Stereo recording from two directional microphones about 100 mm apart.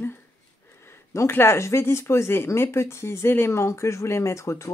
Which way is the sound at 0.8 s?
25° left (ahead or behind).